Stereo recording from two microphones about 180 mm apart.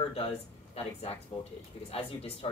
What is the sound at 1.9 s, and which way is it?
Speech, 35° left (ahead or behind).